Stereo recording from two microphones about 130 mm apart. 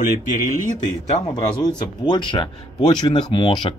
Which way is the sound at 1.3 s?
35° left (ahead or behind).